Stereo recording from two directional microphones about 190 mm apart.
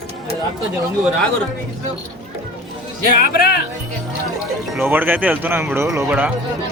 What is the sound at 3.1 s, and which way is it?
Speech, 50° left (ahead or behind).